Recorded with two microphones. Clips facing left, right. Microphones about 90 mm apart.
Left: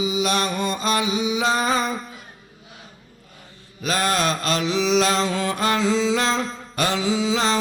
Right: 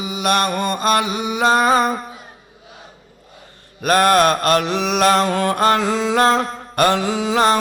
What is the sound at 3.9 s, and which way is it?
Mantra, 55° right (ahead or behind).